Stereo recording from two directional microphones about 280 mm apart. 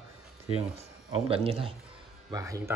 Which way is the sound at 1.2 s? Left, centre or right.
Right.